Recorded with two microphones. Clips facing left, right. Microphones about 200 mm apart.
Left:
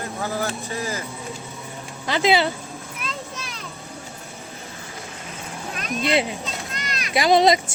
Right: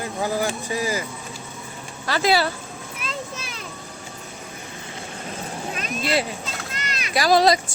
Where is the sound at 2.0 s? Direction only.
20° left (ahead or behind).